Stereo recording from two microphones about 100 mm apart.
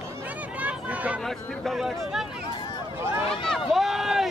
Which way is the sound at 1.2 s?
Centre (ahead or behind).